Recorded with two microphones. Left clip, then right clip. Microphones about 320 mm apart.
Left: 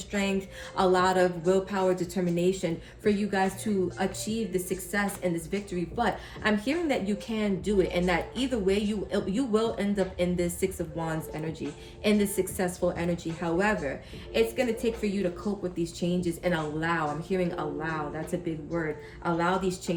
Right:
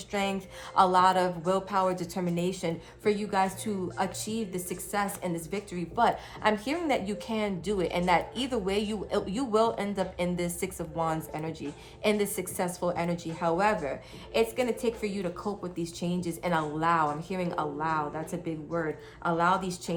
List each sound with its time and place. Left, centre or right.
0.1 s a woman's voice: centre